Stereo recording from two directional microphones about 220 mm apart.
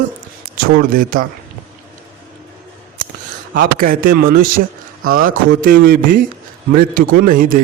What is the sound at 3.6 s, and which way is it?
A man's voice, 40° right (ahead or behind).